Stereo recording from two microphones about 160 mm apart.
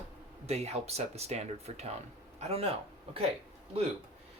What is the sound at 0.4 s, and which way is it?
Speech, 40° right (ahead or behind).